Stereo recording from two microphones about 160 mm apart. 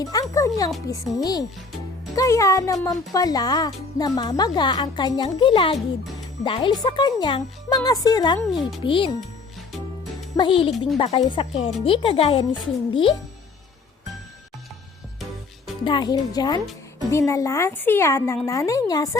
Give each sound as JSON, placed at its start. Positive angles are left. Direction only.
{"t": 0.0, "sound": "music", "side_deg": 25}
{"t": 0.9, "sound": "speech", "side_deg": 25}
{"t": 10.3, "sound": "speech", "side_deg": 30}
{"t": 15.8, "sound": "a woman's voice", "side_deg": 30}